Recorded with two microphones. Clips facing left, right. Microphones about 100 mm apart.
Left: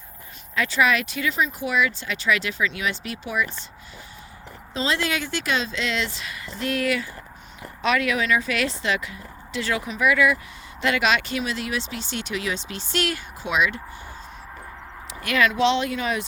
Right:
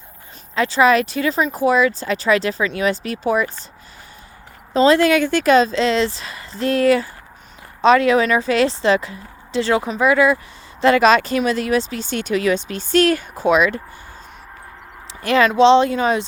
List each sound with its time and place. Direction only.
0.5 s speech: 30° right (ahead or behind)
4.7 s speech: 45° right (ahead or behind)
15.2 s speech: 30° right (ahead or behind)